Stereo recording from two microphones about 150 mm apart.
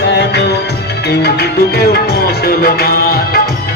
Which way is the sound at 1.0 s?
90° left.